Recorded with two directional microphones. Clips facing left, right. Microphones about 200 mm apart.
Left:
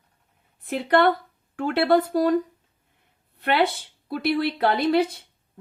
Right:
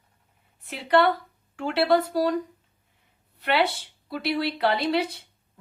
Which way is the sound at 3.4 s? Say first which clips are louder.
Left 2 dB; 50° left (ahead or behind).